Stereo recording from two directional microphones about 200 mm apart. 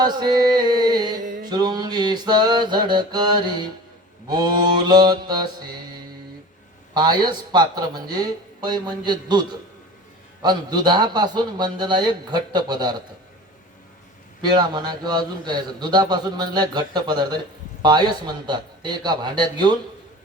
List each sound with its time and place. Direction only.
0.0 s a man's voice: 20° right (ahead or behind)
1.2 s mantra: 40° right (ahead or behind)
1.5 s a man's voice: 20° right (ahead or behind)
14.4 s a man's voice: 20° right (ahead or behind)